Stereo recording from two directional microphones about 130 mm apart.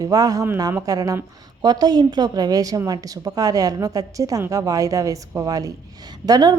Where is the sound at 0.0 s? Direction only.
25° right (ahead or behind).